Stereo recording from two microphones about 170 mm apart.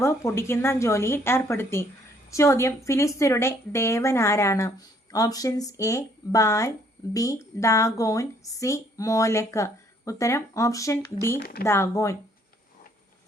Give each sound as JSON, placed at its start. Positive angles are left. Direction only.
{"t": 0.0, "sound": "a woman's voice", "side_deg": 15}